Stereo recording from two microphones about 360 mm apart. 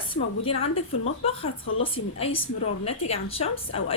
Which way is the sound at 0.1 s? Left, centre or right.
Centre.